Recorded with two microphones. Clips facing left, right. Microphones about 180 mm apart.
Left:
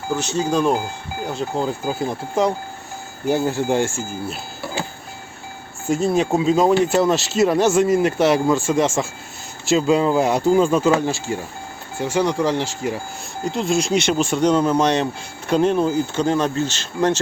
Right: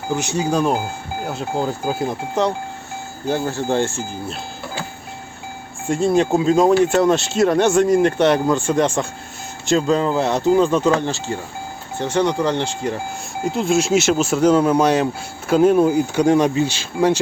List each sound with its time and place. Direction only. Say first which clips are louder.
0.1 s speech: even; 15° right (ahead or behind); by 2.5 s 5° left (ahead or behind)
3.2 s speech: left 2 dB; 15° left (ahead or behind)
5.9 s speech: right 2 dB; centre (ahead or behind)